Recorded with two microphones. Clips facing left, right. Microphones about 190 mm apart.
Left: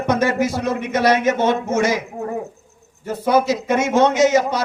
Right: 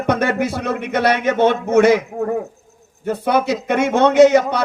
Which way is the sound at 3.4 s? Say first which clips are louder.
Right 1 dB; 60° right (ahead or behind).